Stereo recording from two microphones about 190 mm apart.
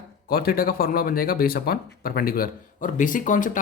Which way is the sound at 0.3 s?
50° left (ahead or behind).